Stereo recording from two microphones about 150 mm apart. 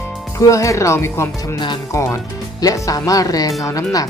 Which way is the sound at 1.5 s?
30° left (ahead or behind).